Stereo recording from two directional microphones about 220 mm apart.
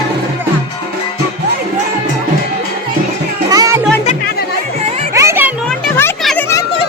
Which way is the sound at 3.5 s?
15° right (ahead or behind).